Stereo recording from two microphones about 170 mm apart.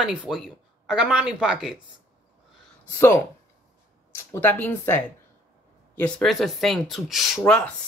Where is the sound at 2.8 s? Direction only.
15° left (ahead or behind); by 7.4 s centre (ahead or behind).